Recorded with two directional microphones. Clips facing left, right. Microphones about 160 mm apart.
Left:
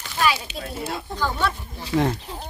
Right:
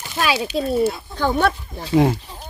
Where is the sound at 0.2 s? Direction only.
90° right.